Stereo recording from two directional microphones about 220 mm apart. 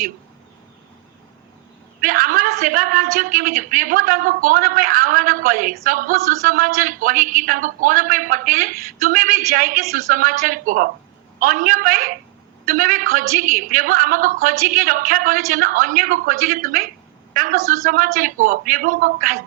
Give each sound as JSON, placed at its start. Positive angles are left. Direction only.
{"t": 2.0, "sound": "a woman's voice", "side_deg": -40}